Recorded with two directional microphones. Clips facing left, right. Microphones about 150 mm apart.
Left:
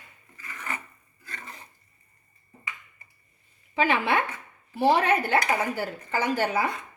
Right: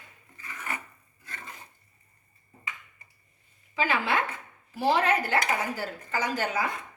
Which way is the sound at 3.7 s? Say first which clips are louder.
Left 3 dB; 60° left (ahead or behind).